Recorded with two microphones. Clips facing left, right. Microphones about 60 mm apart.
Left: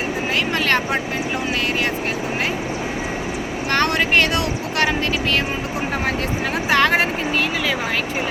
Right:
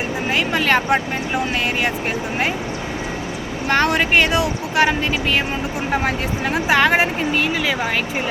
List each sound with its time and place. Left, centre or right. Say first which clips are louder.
0.5 s speech: right 4 dB; centre
3.7 s speech: right 2 dB; centre
5.9 s speech: right 3 dB; centre